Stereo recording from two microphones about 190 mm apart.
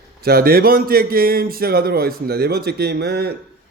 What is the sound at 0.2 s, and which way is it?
A man's voice, 55° right (ahead or behind).